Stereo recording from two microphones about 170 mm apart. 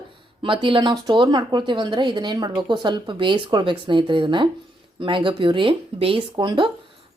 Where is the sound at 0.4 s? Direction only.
30° right (ahead or behind).